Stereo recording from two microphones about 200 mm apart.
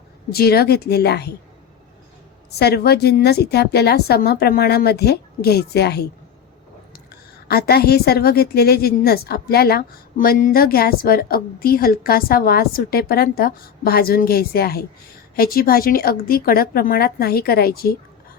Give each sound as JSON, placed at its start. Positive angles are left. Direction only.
{"t": 0.3, "sound": "a woman's voice", "side_deg": 50}
{"t": 2.6, "sound": "a woman's voice", "side_deg": 55}
{"t": 7.4, "sound": "a woman's voice", "side_deg": 50}